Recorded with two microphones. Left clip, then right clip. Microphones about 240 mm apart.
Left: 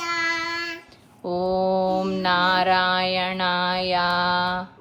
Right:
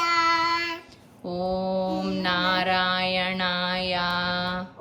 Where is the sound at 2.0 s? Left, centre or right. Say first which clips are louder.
Left 4 dB; centre.